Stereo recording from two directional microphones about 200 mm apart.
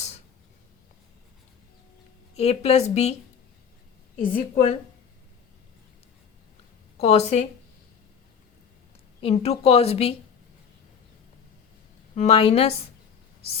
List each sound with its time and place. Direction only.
2.3 s a woman's voice: 30° left (ahead or behind)
4.4 s a woman's voice: 35° left (ahead or behind)
7.0 s a woman's voice: 30° left (ahead or behind)
9.2 s a woman's voice: 30° left (ahead or behind)
12.1 s a woman's voice: 30° left (ahead or behind)